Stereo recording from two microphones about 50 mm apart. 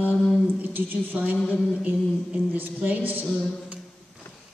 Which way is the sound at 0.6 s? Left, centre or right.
Right.